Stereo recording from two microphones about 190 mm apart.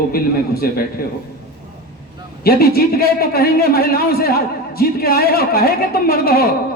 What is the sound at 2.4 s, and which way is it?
A man's voice, 55° left (ahead or behind).